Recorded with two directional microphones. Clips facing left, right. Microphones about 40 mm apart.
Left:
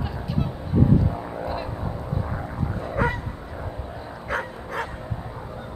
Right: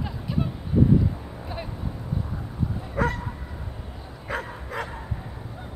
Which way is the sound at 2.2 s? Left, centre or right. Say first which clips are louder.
Left 5 dB; left.